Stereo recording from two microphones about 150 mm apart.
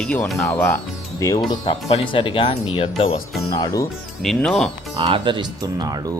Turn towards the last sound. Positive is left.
turn(degrees=-30)  # may be behind; listen again after turning